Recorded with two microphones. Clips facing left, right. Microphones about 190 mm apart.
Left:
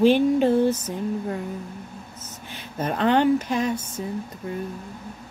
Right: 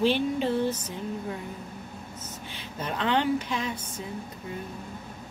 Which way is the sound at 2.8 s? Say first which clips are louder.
Left 7 dB; 45° left (ahead or behind).